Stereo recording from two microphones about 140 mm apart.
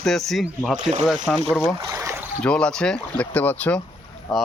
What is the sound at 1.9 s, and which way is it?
Boat, 20° right (ahead or behind).